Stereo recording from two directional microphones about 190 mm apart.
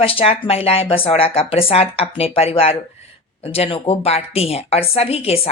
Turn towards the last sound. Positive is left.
turn(degrees=30)  # may be behind; listen again after turning